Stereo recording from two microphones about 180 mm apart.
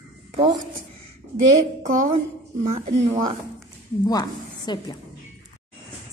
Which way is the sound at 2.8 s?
35° right (ahead or behind).